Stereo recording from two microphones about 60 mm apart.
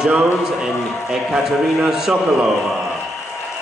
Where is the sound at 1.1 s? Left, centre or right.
Centre.